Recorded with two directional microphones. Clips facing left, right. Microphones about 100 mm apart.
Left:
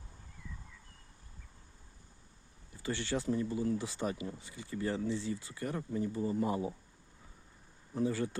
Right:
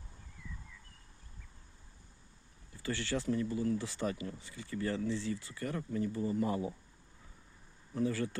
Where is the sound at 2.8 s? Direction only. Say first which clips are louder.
Left 1 dB; 20° left (ahead or behind).